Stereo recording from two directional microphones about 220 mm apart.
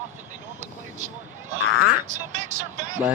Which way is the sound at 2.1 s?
35° right (ahead or behind).